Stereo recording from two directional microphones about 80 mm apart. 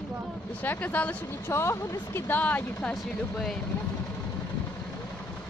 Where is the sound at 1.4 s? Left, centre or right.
Left.